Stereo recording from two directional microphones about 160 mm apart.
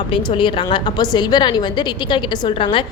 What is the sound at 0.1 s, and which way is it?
A woman's voice, 30° left (ahead or behind).